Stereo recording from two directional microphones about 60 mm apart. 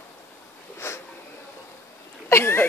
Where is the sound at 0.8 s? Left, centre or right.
Left.